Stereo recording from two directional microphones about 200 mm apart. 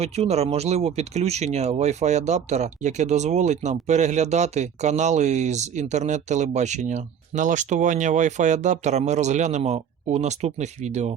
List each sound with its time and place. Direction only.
0.0 s speech: 30° right (ahead or behind)